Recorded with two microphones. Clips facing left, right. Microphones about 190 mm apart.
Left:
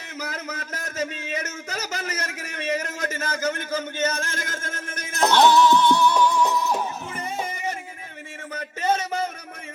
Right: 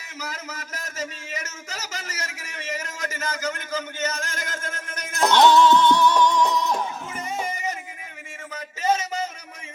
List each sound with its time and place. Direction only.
0.2 s a man's voice: 55° left (ahead or behind)
5.3 s music: 10° left (ahead or behind)
7.4 s music: 55° left (ahead or behind)
8.5 s a sound: 55° left (ahead or behind)